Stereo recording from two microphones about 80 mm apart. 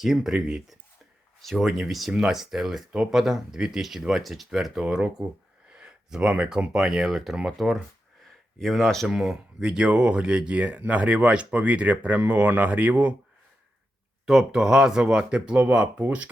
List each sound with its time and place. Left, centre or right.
0.0 s speech: centre
14.3 s speech: centre